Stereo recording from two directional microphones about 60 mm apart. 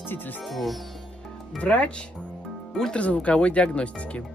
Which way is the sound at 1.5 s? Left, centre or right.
Left.